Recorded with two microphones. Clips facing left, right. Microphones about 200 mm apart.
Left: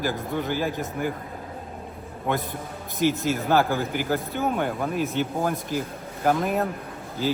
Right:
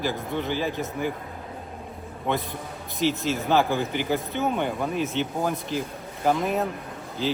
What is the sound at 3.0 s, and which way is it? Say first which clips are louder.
Speech: left 2 dB; 50° left (ahead or behind).